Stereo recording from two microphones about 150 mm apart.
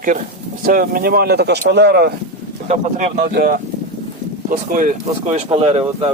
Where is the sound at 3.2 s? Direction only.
90° right.